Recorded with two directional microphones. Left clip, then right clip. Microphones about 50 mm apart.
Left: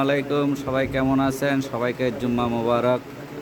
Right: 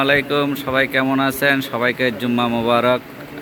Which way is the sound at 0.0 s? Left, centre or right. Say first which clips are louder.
Right 5 dB; centre.